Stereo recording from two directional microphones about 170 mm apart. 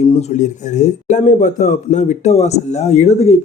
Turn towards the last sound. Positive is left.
turn(degrees=40)  # may be behind; listen again after turning